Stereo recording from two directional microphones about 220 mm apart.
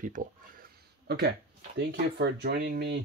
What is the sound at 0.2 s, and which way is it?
Speech, 40° right (ahead or behind).